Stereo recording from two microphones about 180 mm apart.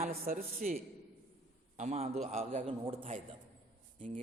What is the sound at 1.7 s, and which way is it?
A man's voice, 40° right (ahead or behind).